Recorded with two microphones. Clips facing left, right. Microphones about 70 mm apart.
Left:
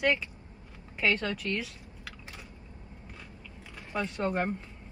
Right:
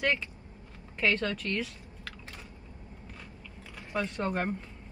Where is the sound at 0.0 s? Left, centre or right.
Centre.